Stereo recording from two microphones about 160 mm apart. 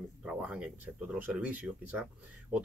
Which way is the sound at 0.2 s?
5° right (ahead or behind).